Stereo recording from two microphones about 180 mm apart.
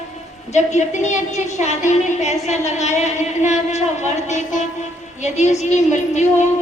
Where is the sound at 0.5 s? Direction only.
40° left (ahead or behind).